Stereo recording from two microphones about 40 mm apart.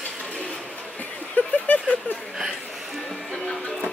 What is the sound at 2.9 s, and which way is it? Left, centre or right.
Speech, centre.